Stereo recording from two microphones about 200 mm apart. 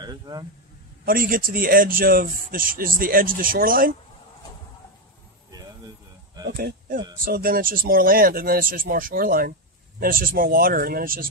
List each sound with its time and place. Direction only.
0.0 s speech: 20° right (ahead or behind)
1.0 s speech: 45° right (ahead or behind)
6.4 s speech: 50° right (ahead or behind)